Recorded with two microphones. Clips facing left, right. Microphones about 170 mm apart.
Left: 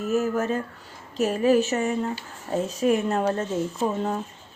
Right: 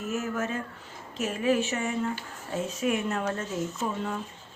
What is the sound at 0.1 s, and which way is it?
Speech, 35° left (ahead or behind).